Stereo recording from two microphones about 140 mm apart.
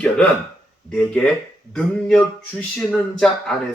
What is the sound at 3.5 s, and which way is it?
Speech, 5° left (ahead or behind).